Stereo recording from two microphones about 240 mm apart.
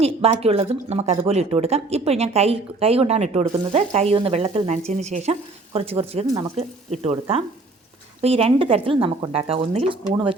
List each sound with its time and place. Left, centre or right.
0.0 s speech: right